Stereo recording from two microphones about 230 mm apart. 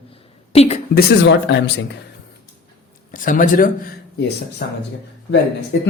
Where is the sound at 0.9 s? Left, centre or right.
Left.